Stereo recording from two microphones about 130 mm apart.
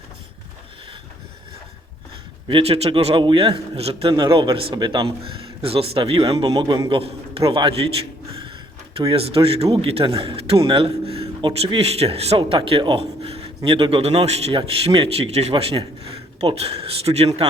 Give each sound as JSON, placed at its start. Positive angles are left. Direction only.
{"t": 2.5, "sound": "a man's voice", "side_deg": -45}
{"t": 9.0, "sound": "a man's voice", "side_deg": -45}